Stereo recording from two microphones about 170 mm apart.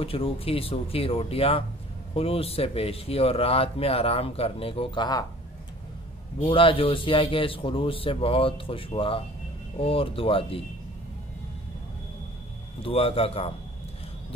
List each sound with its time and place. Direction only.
0.0 s speech: 35° left (ahead or behind)
6.4 s speech: 30° left (ahead or behind)
12.8 s speech: 35° left (ahead or behind)